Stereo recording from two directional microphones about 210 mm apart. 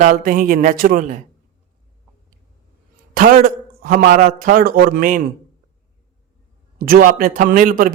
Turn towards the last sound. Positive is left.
turn(degrees=-40)  # may be behind; listen again after turning